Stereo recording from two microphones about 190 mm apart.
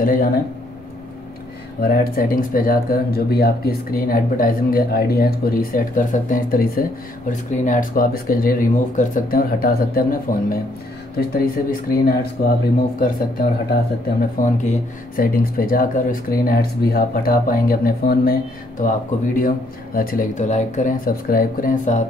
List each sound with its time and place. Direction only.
0.0 s speech: 50° left (ahead or behind)
1.8 s speech: 50° left (ahead or behind)